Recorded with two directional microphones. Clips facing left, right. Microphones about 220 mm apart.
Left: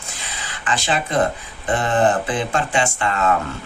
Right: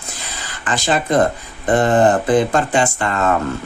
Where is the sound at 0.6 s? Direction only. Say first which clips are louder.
Right 4 dB; 40° right (ahead or behind).